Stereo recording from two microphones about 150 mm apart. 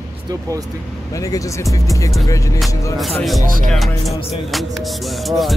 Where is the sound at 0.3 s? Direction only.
25° right (ahead or behind).